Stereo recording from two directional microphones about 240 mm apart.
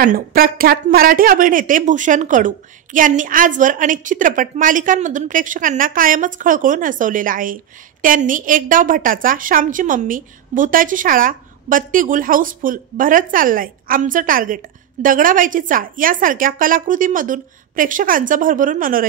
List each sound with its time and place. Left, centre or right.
0.0 s a woman's voice: right